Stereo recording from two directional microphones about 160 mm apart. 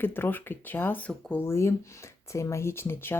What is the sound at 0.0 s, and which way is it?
Speech, 15° left (ahead or behind).